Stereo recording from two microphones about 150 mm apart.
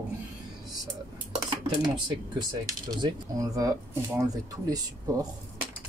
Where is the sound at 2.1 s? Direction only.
30° right (ahead or behind).